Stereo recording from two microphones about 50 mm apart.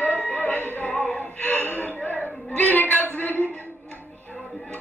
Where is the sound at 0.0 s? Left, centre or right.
Left.